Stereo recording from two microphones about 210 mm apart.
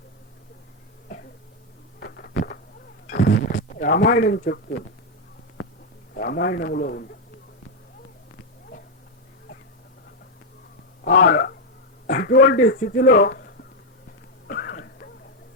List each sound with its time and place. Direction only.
2.0 s a sound: 50° left (ahead or behind)
6.1 s a man's voice: 50° left (ahead or behind)
11.0 s a man's voice: 50° left (ahead or behind)
14.4 s cough: 45° left (ahead or behind)